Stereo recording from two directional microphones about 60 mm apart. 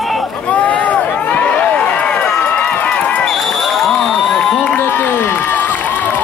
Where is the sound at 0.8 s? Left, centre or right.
Left.